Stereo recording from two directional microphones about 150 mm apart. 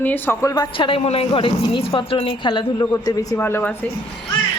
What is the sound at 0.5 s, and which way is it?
A woman's voice, 30° left (ahead or behind).